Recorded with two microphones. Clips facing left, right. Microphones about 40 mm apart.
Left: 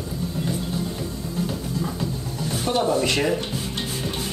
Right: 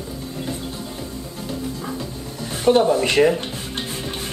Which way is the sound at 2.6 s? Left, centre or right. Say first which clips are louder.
Right 6 dB; right.